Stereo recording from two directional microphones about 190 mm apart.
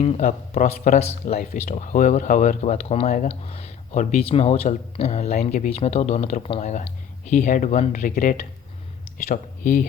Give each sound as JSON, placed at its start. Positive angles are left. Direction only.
{"t": 0.0, "sound": "speech", "side_deg": 30}